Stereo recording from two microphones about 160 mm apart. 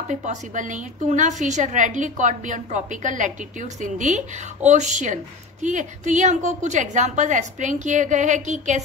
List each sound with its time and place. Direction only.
0.1 s a woman's voice: 50° right (ahead or behind)